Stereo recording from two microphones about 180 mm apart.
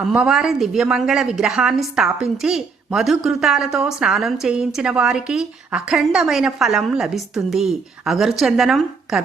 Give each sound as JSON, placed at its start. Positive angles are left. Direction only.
{"t": 0.0, "sound": "speech", "side_deg": -5}